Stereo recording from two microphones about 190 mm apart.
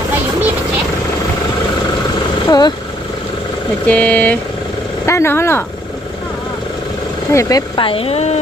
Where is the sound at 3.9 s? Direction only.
5° left (ahead or behind).